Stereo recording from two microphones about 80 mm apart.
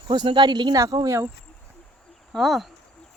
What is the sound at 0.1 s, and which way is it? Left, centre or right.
Speech, right.